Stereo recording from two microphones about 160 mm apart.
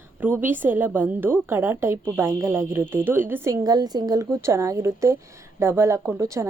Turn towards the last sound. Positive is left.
turn(degrees=-20)  # may be behind; listen again after turning